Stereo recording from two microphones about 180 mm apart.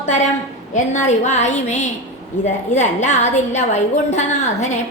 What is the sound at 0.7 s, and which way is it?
A woman's voice, 40° left (ahead or behind).